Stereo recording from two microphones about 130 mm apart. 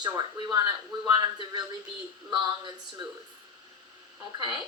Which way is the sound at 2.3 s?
35° right (ahead or behind).